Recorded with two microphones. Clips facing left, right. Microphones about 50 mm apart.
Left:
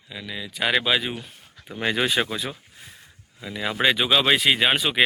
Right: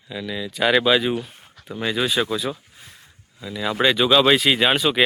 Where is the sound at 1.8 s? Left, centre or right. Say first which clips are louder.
Right 1 dB; left.